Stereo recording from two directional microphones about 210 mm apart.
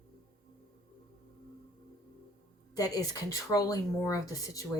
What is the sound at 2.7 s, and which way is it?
Speech, 15° left (ahead or behind).